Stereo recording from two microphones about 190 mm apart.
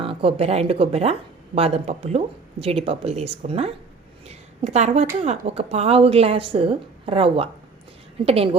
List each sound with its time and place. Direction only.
0.0 s a woman's voice: 30° right (ahead or behind)